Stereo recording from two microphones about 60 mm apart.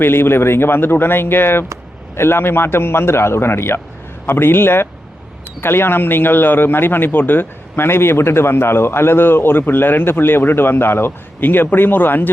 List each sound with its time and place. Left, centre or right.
0.0 s a man's voice: left